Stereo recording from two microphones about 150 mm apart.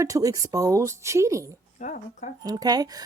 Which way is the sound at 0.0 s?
20° right (ahead or behind).